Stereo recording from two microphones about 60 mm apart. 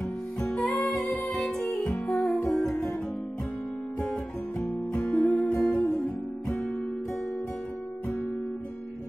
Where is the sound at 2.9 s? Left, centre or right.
Left.